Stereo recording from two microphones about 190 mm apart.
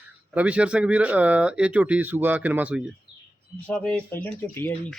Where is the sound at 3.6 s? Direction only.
5° left (ahead or behind).